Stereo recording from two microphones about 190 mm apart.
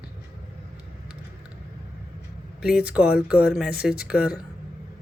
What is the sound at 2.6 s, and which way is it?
A woman's voice, 5° right (ahead or behind).